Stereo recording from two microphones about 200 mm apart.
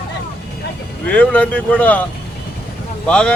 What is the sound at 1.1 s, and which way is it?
Speech, 5° left (ahead or behind).